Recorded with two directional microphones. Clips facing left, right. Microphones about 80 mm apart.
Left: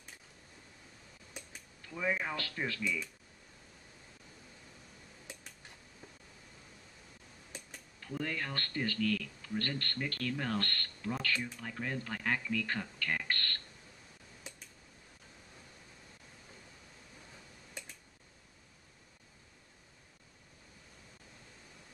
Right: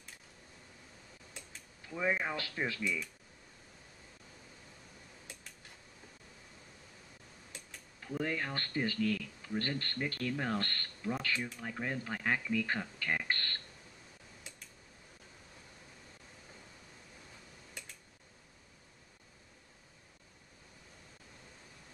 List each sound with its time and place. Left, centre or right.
1.9 s speech: centre
5.2 s dishes: centre
8.0 s speech: centre